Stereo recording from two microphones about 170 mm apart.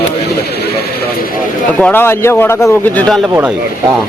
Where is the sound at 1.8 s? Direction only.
10° left (ahead or behind).